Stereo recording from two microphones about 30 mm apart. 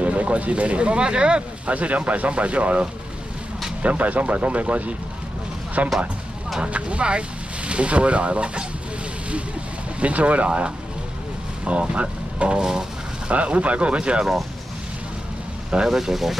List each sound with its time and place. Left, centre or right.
0.0 s speech: right
1.7 s speech: right
3.8 s speech: right
5.8 s speech: right
6.6 s speech: right
9.9 s speech: right
15.9 s speech: centre